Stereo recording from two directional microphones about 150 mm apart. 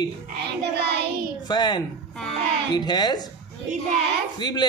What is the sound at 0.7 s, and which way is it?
Child singing, 90° right.